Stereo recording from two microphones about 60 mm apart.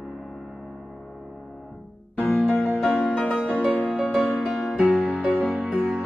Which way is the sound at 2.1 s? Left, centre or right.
Left.